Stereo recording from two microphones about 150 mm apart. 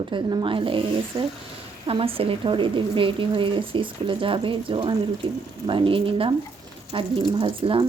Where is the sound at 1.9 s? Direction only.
40° right (ahead or behind).